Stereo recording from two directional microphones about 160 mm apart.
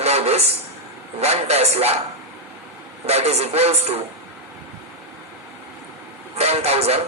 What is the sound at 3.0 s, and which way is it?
A man's voice, 40° right (ahead or behind).